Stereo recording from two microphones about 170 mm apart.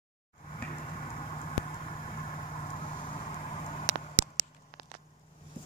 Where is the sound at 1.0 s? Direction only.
40° left (ahead or behind).